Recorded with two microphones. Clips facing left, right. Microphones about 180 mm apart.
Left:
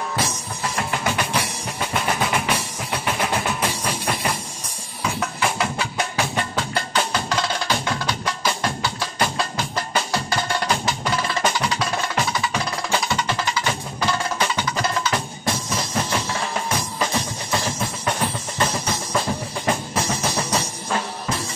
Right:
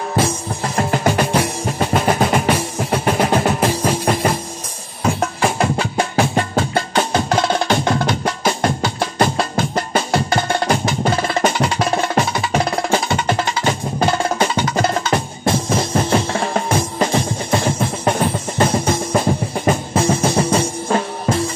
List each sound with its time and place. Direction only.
0.7 s music: 35° right (ahead or behind)
6.5 s percussion: 50° right (ahead or behind)
14.8 s drum: 50° right (ahead or behind)
18.7 s music: 50° right (ahead or behind)